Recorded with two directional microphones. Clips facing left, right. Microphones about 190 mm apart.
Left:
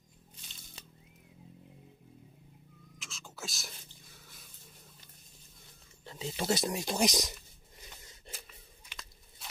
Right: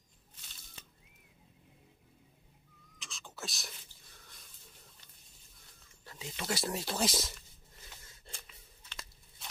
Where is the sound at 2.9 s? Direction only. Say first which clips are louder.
Even; centre (ahead or behind).